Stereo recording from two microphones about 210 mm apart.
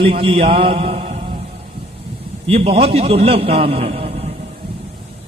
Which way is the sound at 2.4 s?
25° right (ahead or behind).